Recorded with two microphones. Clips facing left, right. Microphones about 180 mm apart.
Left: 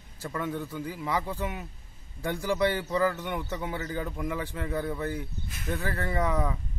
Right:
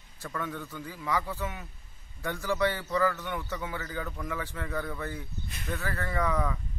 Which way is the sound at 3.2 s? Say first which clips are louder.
Left 2 dB; 25° left (ahead or behind).